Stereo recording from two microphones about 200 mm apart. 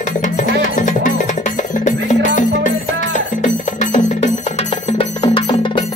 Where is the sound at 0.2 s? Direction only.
40° left (ahead or behind).